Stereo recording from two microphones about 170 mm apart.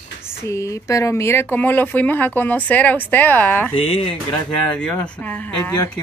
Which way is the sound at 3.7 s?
35° left (ahead or behind).